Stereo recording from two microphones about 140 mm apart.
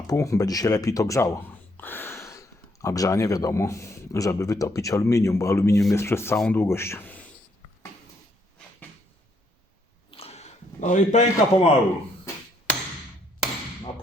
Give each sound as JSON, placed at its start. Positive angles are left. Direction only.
{"t": 0.1, "sound": "speech", "side_deg": 25}
{"t": 6.3, "sound": "speech", "side_deg": 5}
{"t": 6.6, "sound": "speech", "side_deg": 20}
{"t": 10.1, "sound": "a sound", "side_deg": 45}